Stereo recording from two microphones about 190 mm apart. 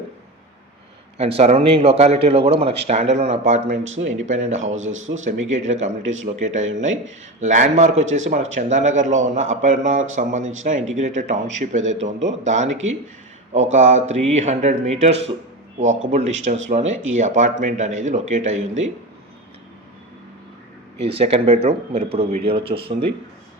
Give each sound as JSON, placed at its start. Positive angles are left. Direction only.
{"t": 1.2, "sound": "speech", "side_deg": -30}
{"t": 4.9, "sound": "speech", "side_deg": -90}
{"t": 5.5, "sound": "speech", "side_deg": -40}
{"t": 16.9, "sound": "speech", "side_deg": -90}
{"t": 17.2, "sound": "speech", "side_deg": -40}
{"t": 21.0, "sound": "speech", "side_deg": -30}